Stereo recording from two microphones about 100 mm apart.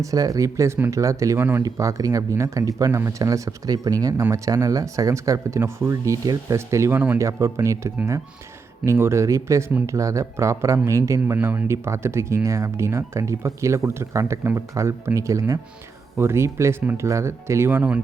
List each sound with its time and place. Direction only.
0.0 s speech: 35° right (ahead or behind); by 18.0 s 15° right (ahead or behind)